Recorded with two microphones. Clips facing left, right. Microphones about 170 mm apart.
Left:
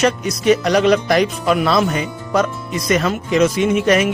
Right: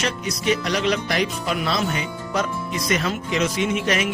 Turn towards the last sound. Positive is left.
turn(degrees=45)  # may be behind; listen again after turning